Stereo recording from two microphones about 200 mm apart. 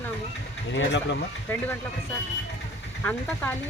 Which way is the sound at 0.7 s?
60° left (ahead or behind).